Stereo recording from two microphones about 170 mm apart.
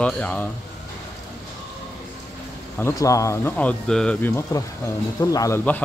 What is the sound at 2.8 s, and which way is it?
A man's voice, 20° left (ahead or behind).